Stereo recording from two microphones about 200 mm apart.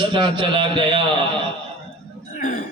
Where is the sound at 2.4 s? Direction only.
45° left (ahead or behind).